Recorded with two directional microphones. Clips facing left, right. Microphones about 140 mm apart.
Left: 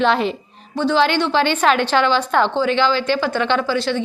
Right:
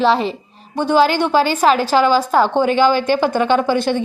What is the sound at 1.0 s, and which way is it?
A woman's voice, 40° right (ahead or behind).